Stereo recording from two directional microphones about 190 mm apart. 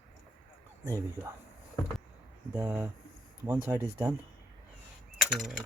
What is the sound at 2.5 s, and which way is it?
Speech, 15° right (ahead or behind).